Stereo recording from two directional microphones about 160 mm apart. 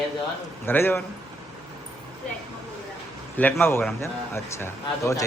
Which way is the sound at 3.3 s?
10° left (ahead or behind).